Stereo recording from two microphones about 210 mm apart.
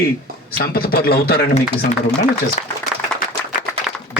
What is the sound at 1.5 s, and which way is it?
Speech, 35° left (ahead or behind).